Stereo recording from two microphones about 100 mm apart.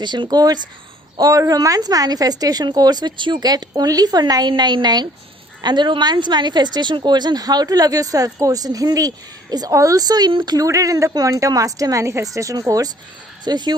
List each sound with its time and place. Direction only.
0.0 s a woman's voice: 50° right (ahead or behind)
10.7 s a woman's voice: 35° right (ahead or behind)